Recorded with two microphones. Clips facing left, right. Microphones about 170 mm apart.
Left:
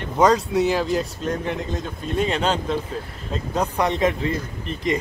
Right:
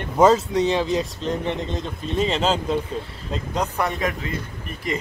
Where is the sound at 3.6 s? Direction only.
20° left (ahead or behind).